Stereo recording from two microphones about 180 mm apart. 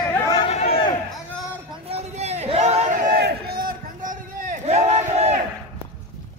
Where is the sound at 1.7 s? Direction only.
35° right (ahead or behind).